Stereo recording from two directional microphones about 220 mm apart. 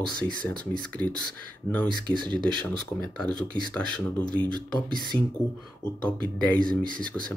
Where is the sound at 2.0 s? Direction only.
20° right (ahead or behind).